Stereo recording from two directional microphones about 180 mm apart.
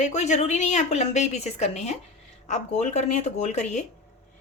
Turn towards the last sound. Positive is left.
turn(degrees=40)  # may be behind; listen again after turning